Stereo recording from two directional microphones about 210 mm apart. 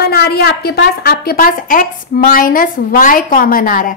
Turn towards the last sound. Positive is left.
turn(degrees=40)  # may be behind; listen again after turning